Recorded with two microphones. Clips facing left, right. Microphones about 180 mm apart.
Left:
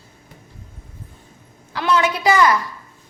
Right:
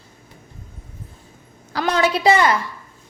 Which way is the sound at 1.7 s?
40° right (ahead or behind).